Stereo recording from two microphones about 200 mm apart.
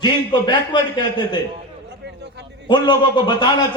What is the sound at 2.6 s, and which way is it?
Speech, 25° left (ahead or behind).